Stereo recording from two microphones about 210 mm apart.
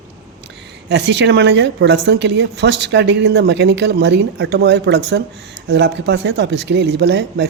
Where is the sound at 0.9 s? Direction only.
55° right (ahead or behind).